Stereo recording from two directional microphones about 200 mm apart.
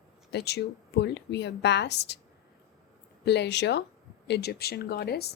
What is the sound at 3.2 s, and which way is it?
A woman's voice, 60° left (ahead or behind).